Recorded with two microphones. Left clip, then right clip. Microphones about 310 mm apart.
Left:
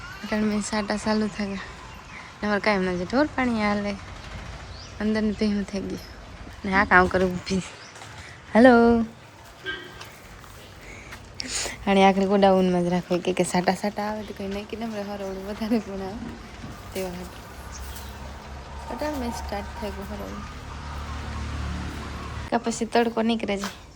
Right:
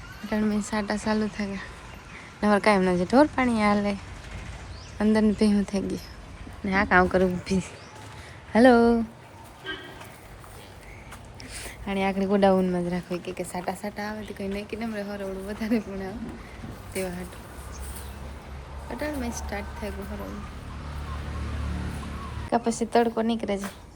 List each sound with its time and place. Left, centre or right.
0.3 s speech: centre
4.9 s speech: centre
11.5 s a woman's voice: centre
13.5 s speech: left
13.9 s speech: centre
18.9 s speech: centre
22.4 s speech: centre